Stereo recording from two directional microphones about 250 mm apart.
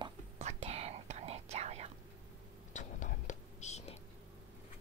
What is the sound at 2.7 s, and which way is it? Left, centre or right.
Whispering, left.